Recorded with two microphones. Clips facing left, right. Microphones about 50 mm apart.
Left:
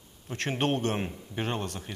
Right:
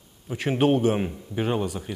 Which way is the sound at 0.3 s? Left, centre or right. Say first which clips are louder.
Right 7 dB; centre.